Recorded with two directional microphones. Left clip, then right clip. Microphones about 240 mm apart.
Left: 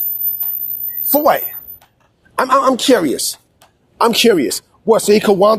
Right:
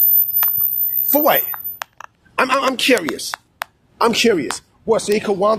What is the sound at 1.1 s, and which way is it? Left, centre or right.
Speech, centre.